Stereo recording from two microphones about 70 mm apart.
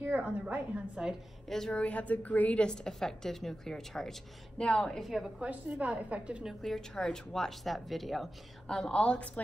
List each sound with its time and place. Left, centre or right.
0.0 s a woman's voice: right
1.5 s a woman's voice: centre
5.4 s a woman's voice: centre
6.6 s speech: centre
8.6 s a woman's voice: centre